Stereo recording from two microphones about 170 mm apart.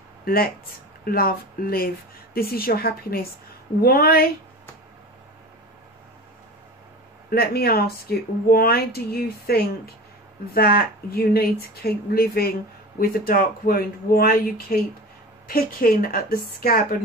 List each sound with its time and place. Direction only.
0.2 s speech: 60° left (ahead or behind)
7.2 s speech: 65° left (ahead or behind)